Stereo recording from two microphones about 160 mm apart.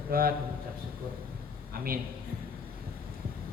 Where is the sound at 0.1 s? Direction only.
65° right (ahead or behind).